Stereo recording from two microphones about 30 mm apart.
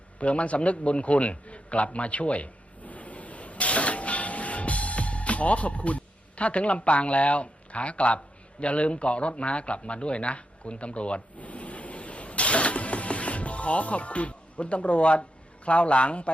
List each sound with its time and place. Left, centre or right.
0.2 s a sound: left
8.6 s speech: left
11.3 s vehicle: left
15.6 s a man's voice: left